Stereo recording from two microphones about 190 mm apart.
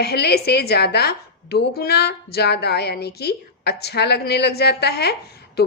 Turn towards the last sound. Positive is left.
turn(degrees=60)  # may be behind; listen again after turning